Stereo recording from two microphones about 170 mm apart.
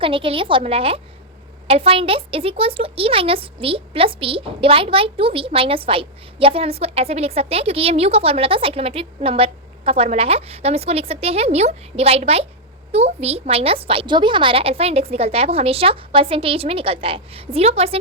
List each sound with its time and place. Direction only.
0.0 s speech: 30° right (ahead or behind)